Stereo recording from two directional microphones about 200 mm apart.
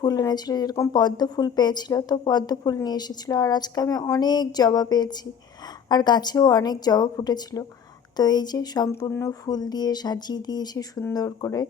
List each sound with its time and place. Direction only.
0.0 s speech: 20° left (ahead or behind)